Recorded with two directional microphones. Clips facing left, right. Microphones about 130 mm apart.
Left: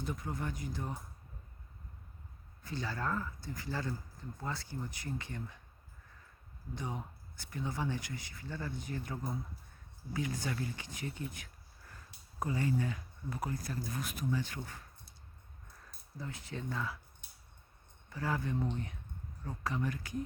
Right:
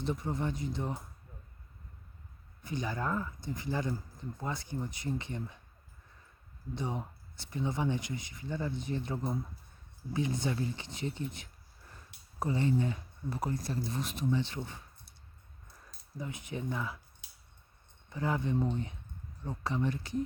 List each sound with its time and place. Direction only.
0.0 s speech: 25° right (ahead or behind)
2.6 s speech: 20° right (ahead or behind)
6.7 s speech: 25° right (ahead or behind)
12.4 s speech: 25° right (ahead or behind)
16.1 s speech: 15° right (ahead or behind)
17.2 s a sound: 90° right
18.1 s speech: 20° right (ahead or behind)